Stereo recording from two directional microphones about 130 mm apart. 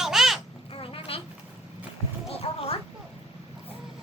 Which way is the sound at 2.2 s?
50° left (ahead or behind).